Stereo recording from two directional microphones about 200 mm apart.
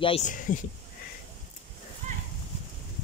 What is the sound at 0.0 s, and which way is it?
Speech, 30° left (ahead or behind).